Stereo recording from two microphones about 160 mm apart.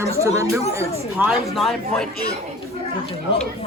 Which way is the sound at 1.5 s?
Centre (ahead or behind).